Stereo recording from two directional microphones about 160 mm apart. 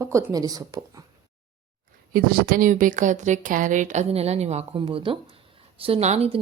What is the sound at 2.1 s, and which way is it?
A woman's voice, 65° right (ahead or behind).